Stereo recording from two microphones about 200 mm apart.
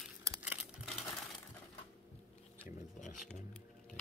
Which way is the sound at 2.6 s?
40° left (ahead or behind).